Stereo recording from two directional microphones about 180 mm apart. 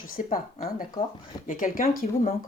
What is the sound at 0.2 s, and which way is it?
Speech, 50° left (ahead or behind).